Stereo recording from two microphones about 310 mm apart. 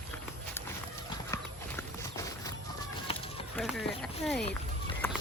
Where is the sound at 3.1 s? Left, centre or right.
Centre.